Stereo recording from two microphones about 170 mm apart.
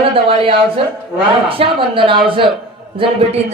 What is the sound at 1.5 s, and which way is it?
A woman's voice, 30° right (ahead or behind).